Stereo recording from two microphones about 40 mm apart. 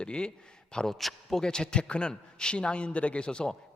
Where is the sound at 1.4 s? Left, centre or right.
Centre.